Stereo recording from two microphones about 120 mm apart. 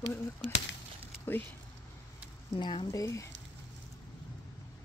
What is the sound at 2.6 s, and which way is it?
Speech, 40° left (ahead or behind).